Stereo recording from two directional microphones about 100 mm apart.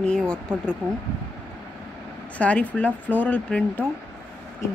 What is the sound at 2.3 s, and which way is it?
A woman's voice, 15° left (ahead or behind).